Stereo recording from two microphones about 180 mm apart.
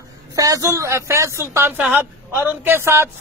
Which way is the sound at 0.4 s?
20° right (ahead or behind).